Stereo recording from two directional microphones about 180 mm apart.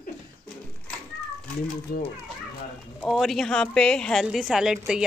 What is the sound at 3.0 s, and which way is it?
A woman's voice, centre (ahead or behind).